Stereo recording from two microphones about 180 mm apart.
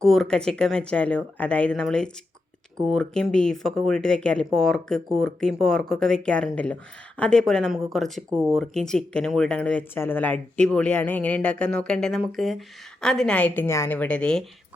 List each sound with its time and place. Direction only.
0.0 s speech: centre (ahead or behind)
8.3 s speech: 15° right (ahead or behind)
8.5 s speech: centre (ahead or behind)